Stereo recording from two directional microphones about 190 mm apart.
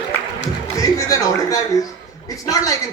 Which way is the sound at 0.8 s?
15° left (ahead or behind).